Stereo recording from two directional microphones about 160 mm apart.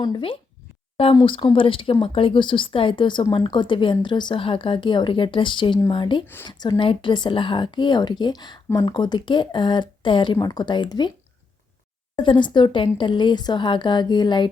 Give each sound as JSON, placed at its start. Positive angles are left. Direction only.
{"t": 0.0, "sound": "a woman's voice", "side_deg": 30}
{"t": 12.1, "sound": "speech", "side_deg": 30}